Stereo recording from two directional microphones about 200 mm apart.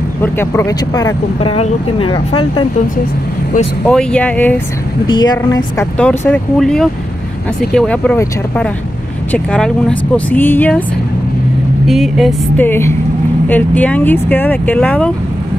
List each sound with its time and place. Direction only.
0.2 s speech: 10° left (ahead or behind)
3.8 s speech: 5° left (ahead or behind)
5.0 s speech: 20° left (ahead or behind)
5.9 s speech: 5° left (ahead or behind)
11.9 s speech: centre (ahead or behind)